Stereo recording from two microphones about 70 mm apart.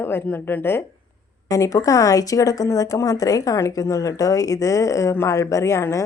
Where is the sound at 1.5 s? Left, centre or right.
Left.